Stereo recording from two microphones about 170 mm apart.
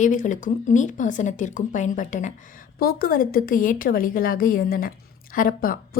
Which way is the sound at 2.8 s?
60° left (ahead or behind).